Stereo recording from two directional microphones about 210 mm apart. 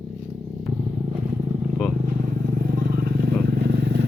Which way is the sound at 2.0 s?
40° right (ahead or behind).